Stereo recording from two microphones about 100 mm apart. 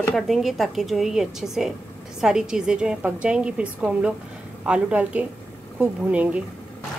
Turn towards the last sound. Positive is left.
turn(degrees=-15)  # may be behind; listen again after turning